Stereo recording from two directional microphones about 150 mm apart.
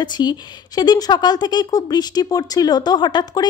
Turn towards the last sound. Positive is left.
turn(degrees=30)  # may be behind; listen again after turning